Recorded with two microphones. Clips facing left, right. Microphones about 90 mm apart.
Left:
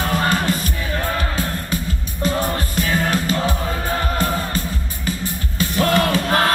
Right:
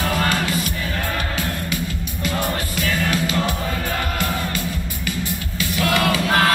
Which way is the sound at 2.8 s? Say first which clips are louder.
Left 2 dB; 40° left (ahead or behind).